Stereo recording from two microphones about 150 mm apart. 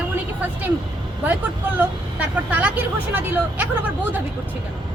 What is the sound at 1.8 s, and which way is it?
Speech, 10° right (ahead or behind).